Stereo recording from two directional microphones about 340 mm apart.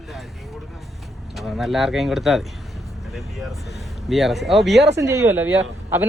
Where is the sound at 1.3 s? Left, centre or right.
Centre.